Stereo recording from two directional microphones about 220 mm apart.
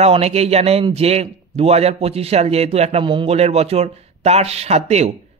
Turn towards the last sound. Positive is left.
turn(degrees=-30)  # may be behind; listen again after turning